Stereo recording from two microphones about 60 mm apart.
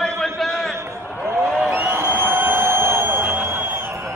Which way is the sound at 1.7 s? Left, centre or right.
Right.